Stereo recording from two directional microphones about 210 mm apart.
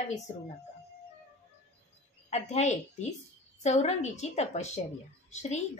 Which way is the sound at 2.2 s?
30° left (ahead or behind).